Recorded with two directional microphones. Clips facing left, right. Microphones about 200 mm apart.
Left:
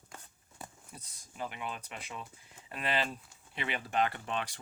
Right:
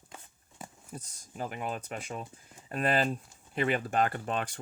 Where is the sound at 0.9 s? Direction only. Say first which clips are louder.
Right 8 dB; 45° right (ahead or behind).